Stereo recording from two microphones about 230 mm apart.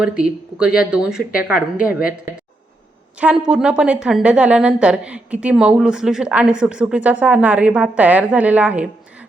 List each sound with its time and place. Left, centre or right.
0.2 s a woman's voice: centre
3.2 s a woman's voice: centre